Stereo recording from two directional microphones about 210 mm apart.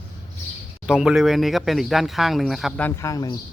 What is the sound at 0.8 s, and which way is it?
Speech, centre (ahead or behind).